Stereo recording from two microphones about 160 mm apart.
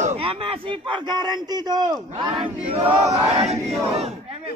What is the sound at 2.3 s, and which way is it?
Chant, 5° right (ahead or behind).